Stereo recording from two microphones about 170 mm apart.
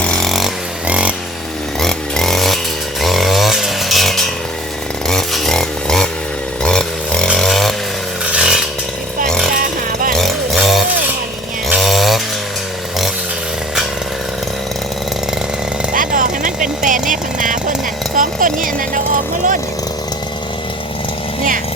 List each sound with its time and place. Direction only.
0.0 s chainsaw: 5° left (ahead or behind)
10.1 s chainsaw: centre (ahead or behind)
15.9 s vehicle: 50° right (ahead or behind)
18.2 s a sound: 50° right (ahead or behind)